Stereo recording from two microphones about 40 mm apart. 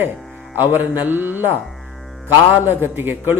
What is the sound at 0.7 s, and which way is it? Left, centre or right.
Speech, right.